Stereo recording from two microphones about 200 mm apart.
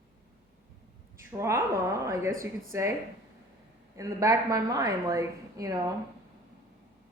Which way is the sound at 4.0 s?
15° right (ahead or behind).